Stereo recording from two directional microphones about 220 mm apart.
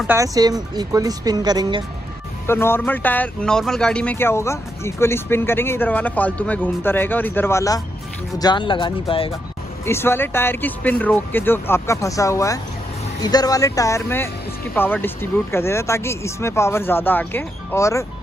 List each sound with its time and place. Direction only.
0.0 s speech: 10° right (ahead or behind)
2.5 s speech: 10° left (ahead or behind)
9.8 s speech: 10° left (ahead or behind)